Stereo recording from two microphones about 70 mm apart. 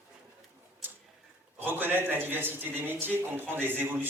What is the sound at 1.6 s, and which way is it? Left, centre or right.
A man's voice, right.